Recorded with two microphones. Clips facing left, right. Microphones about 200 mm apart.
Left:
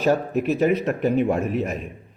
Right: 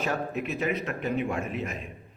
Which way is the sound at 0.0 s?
40° left (ahead or behind).